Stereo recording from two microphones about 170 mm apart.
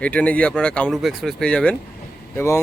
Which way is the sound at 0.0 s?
10° left (ahead or behind).